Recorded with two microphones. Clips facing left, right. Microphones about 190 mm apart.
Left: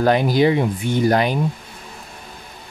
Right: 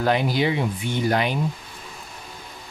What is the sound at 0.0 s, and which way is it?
Speech, 45° left (ahead or behind).